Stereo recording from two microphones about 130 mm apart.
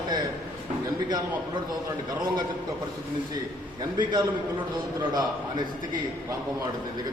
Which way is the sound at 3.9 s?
35° right (ahead or behind).